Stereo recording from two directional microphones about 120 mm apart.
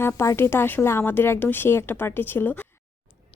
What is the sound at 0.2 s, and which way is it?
Speech, 20° left (ahead or behind).